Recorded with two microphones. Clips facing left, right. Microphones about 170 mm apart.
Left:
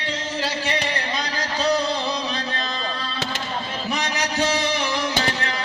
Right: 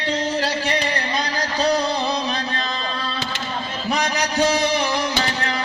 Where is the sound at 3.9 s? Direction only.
40° right (ahead or behind).